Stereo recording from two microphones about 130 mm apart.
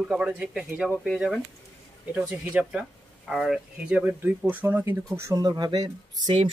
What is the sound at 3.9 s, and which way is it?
Speech, 10° right (ahead or behind).